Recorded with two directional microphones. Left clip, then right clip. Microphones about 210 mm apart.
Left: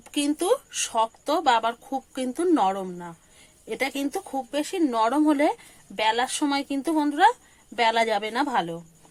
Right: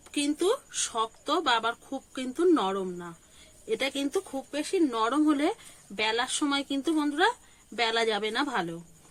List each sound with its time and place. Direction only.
0.0 s speech: 30° left (ahead or behind)